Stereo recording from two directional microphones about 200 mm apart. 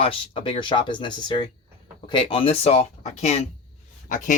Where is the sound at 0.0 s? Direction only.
25° left (ahead or behind).